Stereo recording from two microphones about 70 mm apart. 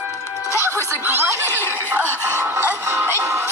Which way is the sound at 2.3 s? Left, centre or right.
Right.